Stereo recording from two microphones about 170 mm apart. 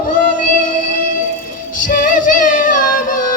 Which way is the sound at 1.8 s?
50° left (ahead or behind).